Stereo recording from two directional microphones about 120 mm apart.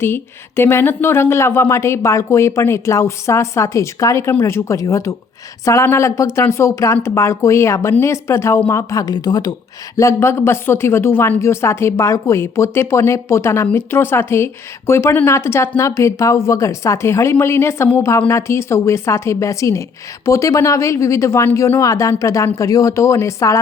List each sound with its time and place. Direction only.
0.0 s speech: 20° left (ahead or behind); by 9.6 s 35° left (ahead or behind)
10.0 s speech: 25° left (ahead or behind)